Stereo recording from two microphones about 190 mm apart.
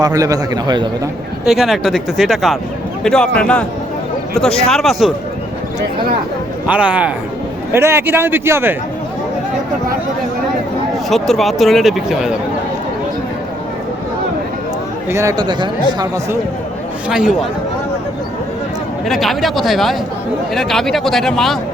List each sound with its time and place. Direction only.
0.0 s speech: 20° right (ahead or behind)
1.5 s speech: centre (ahead or behind)
6.7 s a man's voice: 5° right (ahead or behind)
11.1 s speech: centre (ahead or behind)
15.1 s speech: 15° right (ahead or behind)
17.1 s speech: 5° right (ahead or behind)
19.0 s speech: centre (ahead or behind)